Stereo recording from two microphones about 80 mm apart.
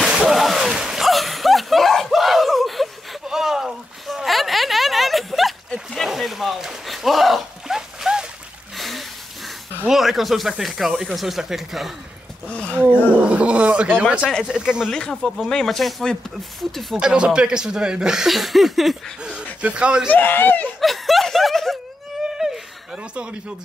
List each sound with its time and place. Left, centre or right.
0.0 s splash: centre
5.9 s a sound: centre
9.8 s speech: centre
12.4 s speech: centre
13.1 s speech: centre
14.9 s speech: centre
16.9 s speech: centre
19.6 s speech: centre
20.1 s speech: left
20.8 s snicker: centre